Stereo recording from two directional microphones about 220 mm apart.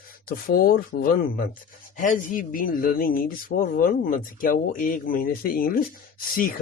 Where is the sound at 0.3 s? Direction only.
40° left (ahead or behind).